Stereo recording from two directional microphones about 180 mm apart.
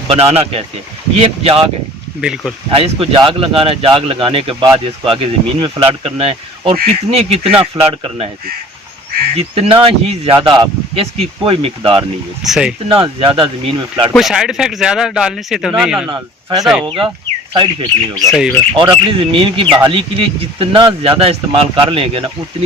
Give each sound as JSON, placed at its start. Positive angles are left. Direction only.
{"t": 0.1, "sound": "speech", "side_deg": -35}
{"t": 2.2, "sound": "speech", "side_deg": -5}
{"t": 2.6, "sound": "speech", "side_deg": -30}
{"t": 9.3, "sound": "speech", "side_deg": -35}
{"t": 12.4, "sound": "speech", "side_deg": -5}
{"t": 12.9, "sound": "speech", "side_deg": -30}
{"t": 14.1, "sound": "speech", "side_deg": 0}
{"t": 16.0, "sound": "speech", "side_deg": -25}
{"t": 18.3, "sound": "speech", "side_deg": 0}
{"t": 18.8, "sound": "speech", "side_deg": -30}